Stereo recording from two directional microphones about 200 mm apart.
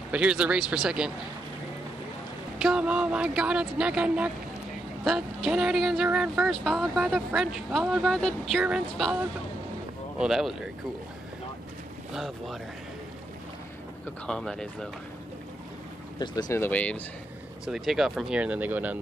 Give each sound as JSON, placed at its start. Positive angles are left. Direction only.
{"t": 0.1, "sound": "speech", "side_deg": -5}
{"t": 2.6, "sound": "speech", "side_deg": -5}
{"t": 12.1, "sound": "speech", "side_deg": 0}
{"t": 14.2, "sound": "speech", "side_deg": 5}
{"t": 16.2, "sound": "speech", "side_deg": 20}